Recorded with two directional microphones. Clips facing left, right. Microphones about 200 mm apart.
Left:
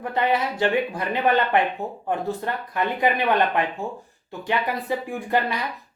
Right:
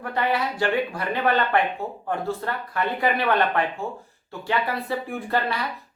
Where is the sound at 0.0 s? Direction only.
20° left (ahead or behind).